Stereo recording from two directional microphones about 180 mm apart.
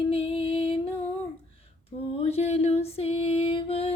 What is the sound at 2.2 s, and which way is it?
Female singing, 35° left (ahead or behind).